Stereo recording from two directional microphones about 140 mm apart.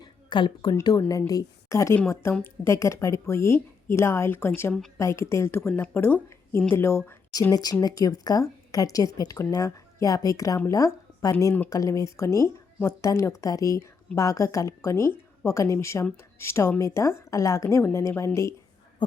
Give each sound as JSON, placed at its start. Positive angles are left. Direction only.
{"t": 0.0, "sound": "a woman's voice", "side_deg": 35}
{"t": 7.5, "sound": "speech", "side_deg": 25}